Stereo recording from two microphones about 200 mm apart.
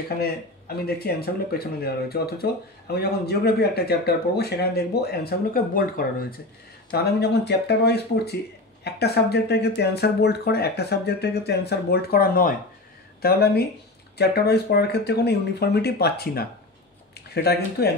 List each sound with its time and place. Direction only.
0.8 s speech: 50° left (ahead or behind)